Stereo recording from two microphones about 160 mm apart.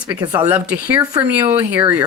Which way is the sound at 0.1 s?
25° right (ahead or behind).